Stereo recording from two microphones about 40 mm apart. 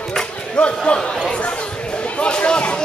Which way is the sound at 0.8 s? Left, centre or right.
Centre.